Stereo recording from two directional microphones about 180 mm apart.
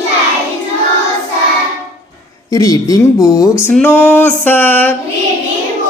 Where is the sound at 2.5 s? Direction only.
20° left (ahead or behind).